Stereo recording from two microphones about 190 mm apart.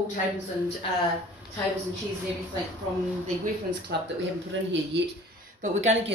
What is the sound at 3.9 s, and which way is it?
Speech, 55° right (ahead or behind).